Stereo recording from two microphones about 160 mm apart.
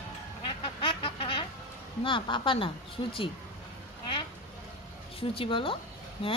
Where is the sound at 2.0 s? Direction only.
30° left (ahead or behind).